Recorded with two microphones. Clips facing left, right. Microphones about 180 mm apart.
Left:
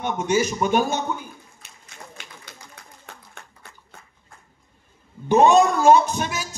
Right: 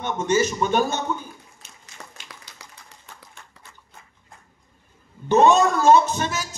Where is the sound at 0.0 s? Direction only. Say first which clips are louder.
Even; 10° left (ahead or behind).